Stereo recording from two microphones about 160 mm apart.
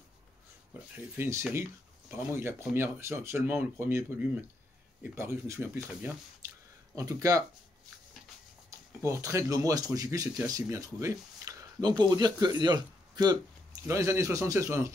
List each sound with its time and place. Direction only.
1.1 s speech: 15° right (ahead or behind)
5.1 s speech: 15° right (ahead or behind)
8.6 s speech: 20° right (ahead or behind)